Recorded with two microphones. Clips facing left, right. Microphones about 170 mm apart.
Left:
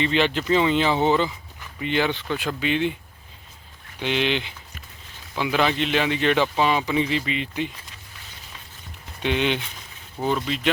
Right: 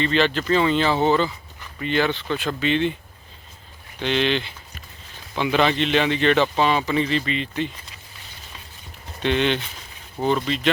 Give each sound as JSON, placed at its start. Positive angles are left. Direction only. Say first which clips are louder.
{"t": 0.0, "sound": "speech", "louder": "right 1 dB", "side_deg": 15}
{"t": 4.0, "sound": "speech", "louder": "right 2 dB", "side_deg": 10}
{"t": 9.2, "sound": "speech", "louder": "right 2 dB", "side_deg": 10}